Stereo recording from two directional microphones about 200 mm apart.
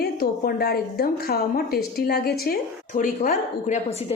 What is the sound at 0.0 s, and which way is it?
A woman's voice, 50° left (ahead or behind).